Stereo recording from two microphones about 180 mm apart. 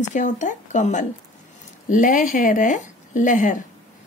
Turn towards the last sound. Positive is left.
turn(degrees=45)  # may be behind; listen again after turning